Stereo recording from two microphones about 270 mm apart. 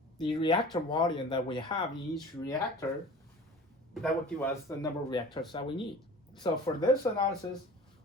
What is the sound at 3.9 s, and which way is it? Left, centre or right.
Speech, centre.